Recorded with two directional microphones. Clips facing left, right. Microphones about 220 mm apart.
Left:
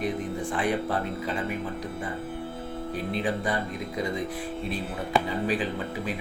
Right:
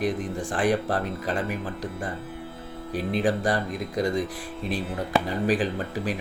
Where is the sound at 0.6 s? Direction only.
35° right (ahead or behind).